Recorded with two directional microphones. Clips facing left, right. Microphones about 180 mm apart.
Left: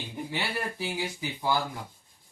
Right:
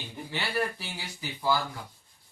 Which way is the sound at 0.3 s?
15° left (ahead or behind).